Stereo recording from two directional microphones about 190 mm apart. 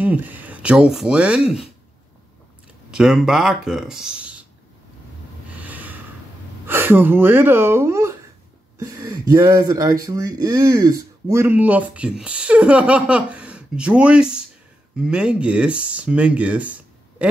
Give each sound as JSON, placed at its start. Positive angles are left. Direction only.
{"t": 0.0, "sound": "speech", "side_deg": -10}
{"t": 2.9, "sound": "speech", "side_deg": -5}
{"t": 5.6, "sound": "snort", "side_deg": -10}
{"t": 6.6, "sound": "speech", "side_deg": -10}